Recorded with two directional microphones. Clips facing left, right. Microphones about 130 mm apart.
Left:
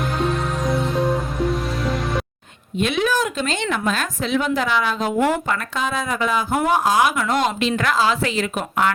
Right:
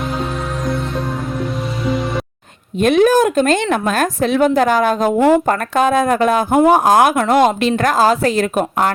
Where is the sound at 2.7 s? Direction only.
45° right (ahead or behind).